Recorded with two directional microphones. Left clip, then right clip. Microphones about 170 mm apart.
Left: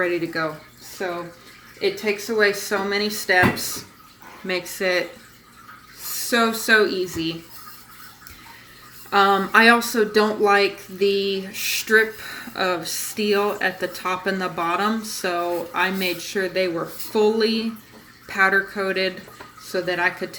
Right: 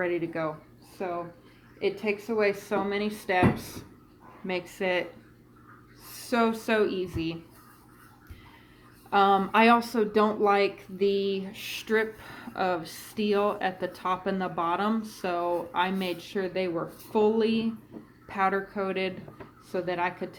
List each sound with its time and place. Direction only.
0.0 s speech: 15° left (ahead or behind)
6.1 s speech: 20° left (ahead or behind)
9.0 s speech: 20° left (ahead or behind)